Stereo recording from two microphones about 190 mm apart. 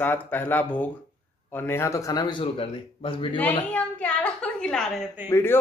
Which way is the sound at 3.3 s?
10° left (ahead or behind).